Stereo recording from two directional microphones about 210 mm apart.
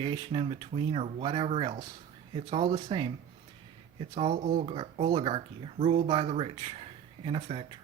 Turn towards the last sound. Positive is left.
turn(degrees=-25)  # may be behind; listen again after turning